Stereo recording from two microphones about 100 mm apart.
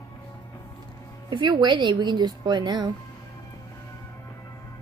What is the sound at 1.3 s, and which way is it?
Speech, 50° right (ahead or behind).